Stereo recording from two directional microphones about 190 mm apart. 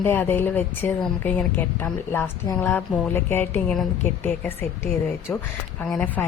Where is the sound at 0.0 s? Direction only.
10° left (ahead or behind).